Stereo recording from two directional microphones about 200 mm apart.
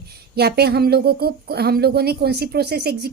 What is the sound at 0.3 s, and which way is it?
Speech, 55° right (ahead or behind).